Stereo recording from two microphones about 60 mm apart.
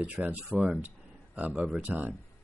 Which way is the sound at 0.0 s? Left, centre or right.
Right.